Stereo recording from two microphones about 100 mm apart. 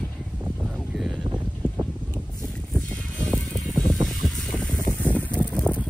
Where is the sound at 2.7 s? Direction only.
15° left (ahead or behind).